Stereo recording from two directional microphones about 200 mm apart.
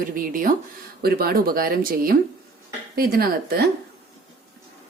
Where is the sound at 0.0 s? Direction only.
45° right (ahead or behind).